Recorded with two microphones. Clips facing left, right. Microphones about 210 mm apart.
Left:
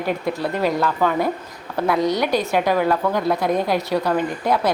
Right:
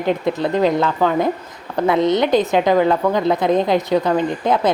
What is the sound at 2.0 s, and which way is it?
A woman's voice, 20° right (ahead or behind).